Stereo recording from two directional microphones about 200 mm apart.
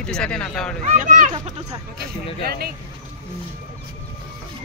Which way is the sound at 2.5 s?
50° right (ahead or behind).